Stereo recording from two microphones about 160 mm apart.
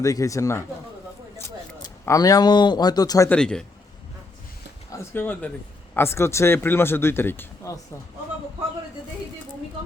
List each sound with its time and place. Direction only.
0.0 s speech: 20° left (ahead or behind)
2.0 s speech: 20° left (ahead or behind)
3.2 s speech: 5° left (ahead or behind)
4.9 s speech: 15° left (ahead or behind)